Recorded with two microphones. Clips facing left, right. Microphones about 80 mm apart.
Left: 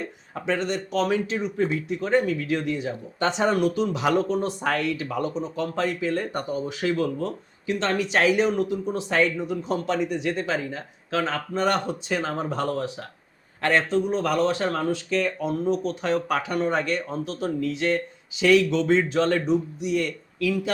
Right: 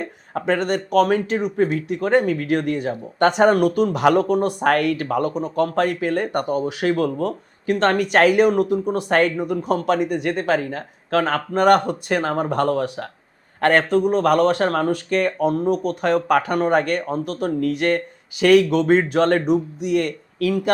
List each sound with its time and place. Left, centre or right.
0.0 s speech: right